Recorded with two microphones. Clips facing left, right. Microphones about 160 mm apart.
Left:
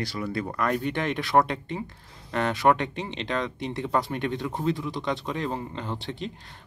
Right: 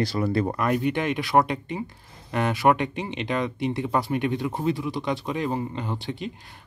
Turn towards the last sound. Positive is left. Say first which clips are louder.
# right 2 dB
turn(degrees=-5)  # may be behind; listen again after turning